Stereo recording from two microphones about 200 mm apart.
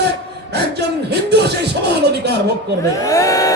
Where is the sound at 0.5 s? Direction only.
55° right (ahead or behind).